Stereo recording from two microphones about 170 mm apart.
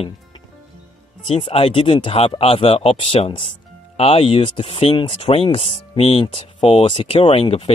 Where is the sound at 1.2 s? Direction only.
35° left (ahead or behind).